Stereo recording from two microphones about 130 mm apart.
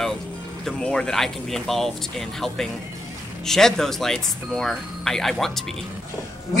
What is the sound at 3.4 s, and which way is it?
Speech, 5° left (ahead or behind).